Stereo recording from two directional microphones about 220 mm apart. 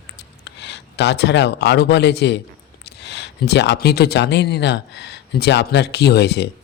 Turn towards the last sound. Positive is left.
turn(degrees=50)  # may be behind; listen again after turning